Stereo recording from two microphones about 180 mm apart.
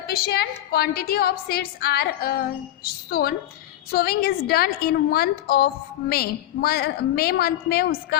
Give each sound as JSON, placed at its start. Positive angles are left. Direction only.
{"t": 0.1, "sound": "a woman's voice", "side_deg": 60}